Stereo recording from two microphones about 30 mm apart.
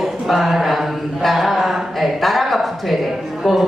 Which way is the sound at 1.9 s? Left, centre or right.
Centre.